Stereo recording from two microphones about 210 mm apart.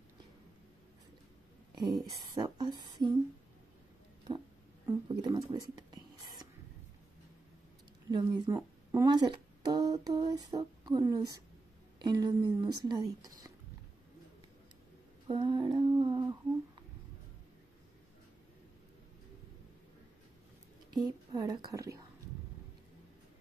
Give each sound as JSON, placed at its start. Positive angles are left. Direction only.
{"t": 1.8, "sound": "speech", "side_deg": -20}
{"t": 4.8, "sound": "speech", "side_deg": -20}
{"t": 5.5, "sound": "whispering", "side_deg": -20}
{"t": 8.1, "sound": "speech", "side_deg": -20}
{"t": 15.2, "sound": "humming", "side_deg": -20}
{"t": 20.9, "sound": "speech", "side_deg": -20}